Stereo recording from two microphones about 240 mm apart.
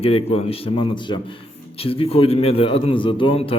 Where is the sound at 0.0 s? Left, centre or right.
Left.